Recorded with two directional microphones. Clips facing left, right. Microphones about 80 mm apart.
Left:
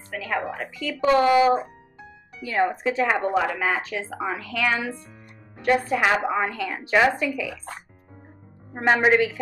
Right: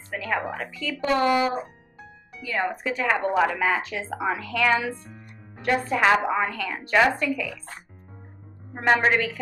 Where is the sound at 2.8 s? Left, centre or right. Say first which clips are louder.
Left 2 dB; left.